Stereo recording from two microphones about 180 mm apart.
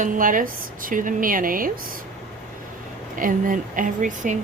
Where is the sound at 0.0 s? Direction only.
50° right (ahead or behind).